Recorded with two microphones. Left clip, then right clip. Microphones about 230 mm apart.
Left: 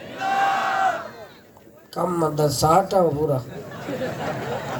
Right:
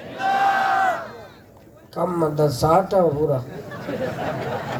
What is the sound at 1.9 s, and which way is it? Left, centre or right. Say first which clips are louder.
Speech: right 1 dB; left.